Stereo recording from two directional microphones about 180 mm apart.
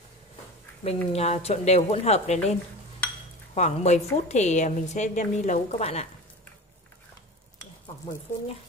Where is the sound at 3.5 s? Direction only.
40° left (ahead or behind).